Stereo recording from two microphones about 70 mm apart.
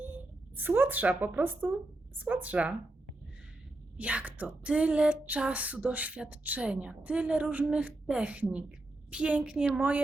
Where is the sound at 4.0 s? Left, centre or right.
Centre.